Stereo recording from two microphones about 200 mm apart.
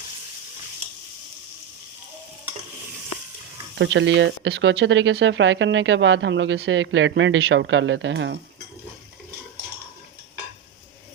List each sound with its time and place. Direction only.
3.8 s speech: 70° right (ahead or behind)